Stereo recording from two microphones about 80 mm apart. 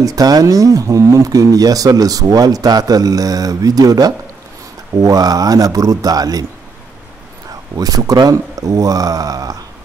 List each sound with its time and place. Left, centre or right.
0.0 s speech: right
7.7 s speech: right